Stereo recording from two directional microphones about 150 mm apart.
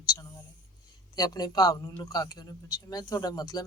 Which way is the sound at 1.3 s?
25° left (ahead or behind).